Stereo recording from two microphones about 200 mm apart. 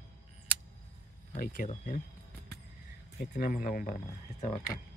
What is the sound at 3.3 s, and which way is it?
Speech, 45° left (ahead or behind).